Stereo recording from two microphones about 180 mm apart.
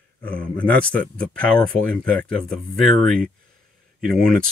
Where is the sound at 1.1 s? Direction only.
5° left (ahead or behind).